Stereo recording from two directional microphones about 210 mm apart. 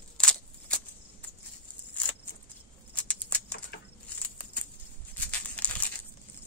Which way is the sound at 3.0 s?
5° left (ahead or behind).